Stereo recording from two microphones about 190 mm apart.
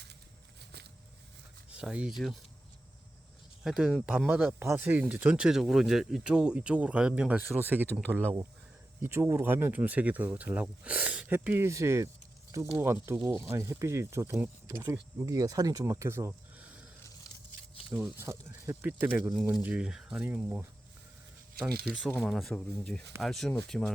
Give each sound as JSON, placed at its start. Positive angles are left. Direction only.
{"t": 1.7, "sound": "speech", "side_deg": -5}
{"t": 3.6, "sound": "speech", "side_deg": 0}
{"t": 17.9, "sound": "speech", "side_deg": -10}
{"t": 21.7, "sound": "speech", "side_deg": -55}
{"t": 22.1, "sound": "speech", "side_deg": 0}